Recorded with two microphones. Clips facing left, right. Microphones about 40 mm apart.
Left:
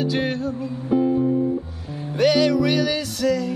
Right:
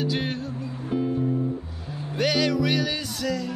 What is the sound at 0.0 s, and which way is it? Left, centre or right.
Music, centre.